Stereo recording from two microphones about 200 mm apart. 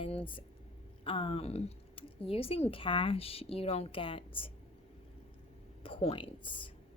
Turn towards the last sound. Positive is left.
turn(degrees=25)  # may be behind; listen again after turning